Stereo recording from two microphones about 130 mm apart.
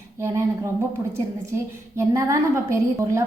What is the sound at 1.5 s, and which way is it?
A woman's voice, 25° right (ahead or behind).